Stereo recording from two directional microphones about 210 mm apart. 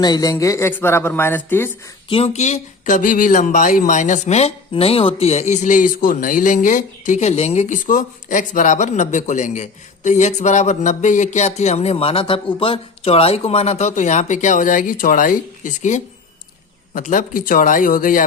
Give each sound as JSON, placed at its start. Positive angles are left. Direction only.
{"t": 0.0, "sound": "speech", "side_deg": 20}
{"t": 2.0, "sound": "speech", "side_deg": 25}